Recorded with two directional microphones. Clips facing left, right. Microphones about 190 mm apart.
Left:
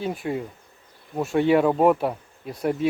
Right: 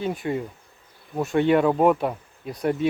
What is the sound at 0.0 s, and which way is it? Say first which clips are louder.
Speech: right 1 dB; centre (ahead or behind).